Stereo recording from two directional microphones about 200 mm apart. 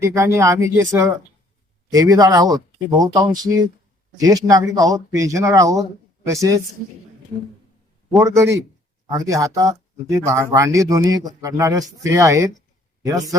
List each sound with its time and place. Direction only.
0.0 s speech: 15° right (ahead or behind)
8.2 s speech: 15° right (ahead or behind)